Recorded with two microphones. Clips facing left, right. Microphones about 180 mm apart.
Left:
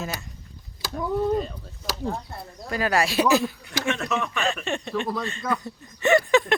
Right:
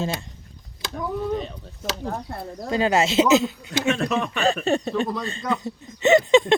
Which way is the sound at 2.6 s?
25° right (ahead or behind).